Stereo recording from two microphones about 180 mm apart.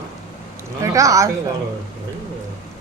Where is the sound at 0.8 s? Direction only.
15° right (ahead or behind).